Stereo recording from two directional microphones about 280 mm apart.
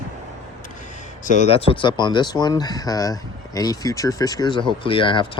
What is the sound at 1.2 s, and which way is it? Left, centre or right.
Speech, left.